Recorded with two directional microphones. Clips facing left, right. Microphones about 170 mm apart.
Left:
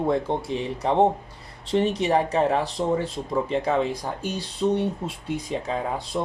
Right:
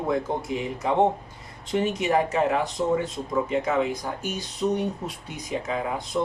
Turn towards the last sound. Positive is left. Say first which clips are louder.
# left 1 dB
turn(degrees=30)  # may be behind; listen again after turning